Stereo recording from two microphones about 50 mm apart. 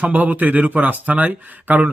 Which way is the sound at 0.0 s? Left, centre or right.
Right.